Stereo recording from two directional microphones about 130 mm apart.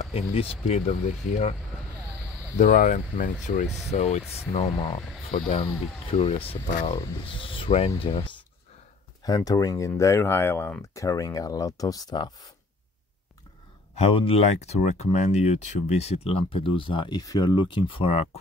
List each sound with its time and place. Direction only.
0.0 s speech: 50° left (ahead or behind)
2.5 s speech: 75° left (ahead or behind); by 8.3 s 45° left (ahead or behind)
9.2 s speech: 30° left (ahead or behind)
13.9 s speech: 50° left (ahead or behind)